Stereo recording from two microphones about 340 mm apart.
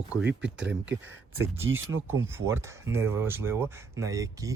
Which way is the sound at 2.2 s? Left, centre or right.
Centre.